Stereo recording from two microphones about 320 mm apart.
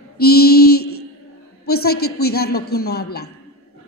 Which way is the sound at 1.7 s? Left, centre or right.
Left.